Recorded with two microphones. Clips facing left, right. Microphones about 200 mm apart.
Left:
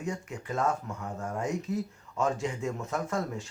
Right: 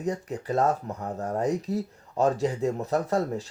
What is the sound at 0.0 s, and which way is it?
Speech, 35° right (ahead or behind).